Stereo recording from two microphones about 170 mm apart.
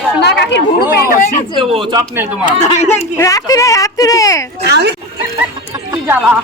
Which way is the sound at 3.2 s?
20° left (ahead or behind).